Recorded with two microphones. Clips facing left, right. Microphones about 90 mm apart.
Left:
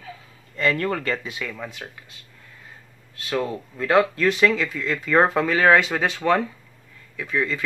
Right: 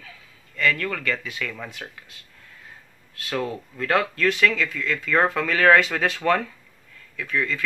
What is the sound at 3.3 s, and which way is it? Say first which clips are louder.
Speech: left 2 dB; 10° left (ahead or behind).